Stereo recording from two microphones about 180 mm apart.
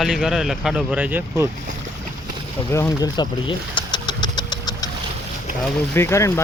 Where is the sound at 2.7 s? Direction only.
20° left (ahead or behind).